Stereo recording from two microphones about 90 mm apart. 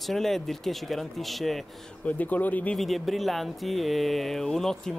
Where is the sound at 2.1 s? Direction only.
15° left (ahead or behind).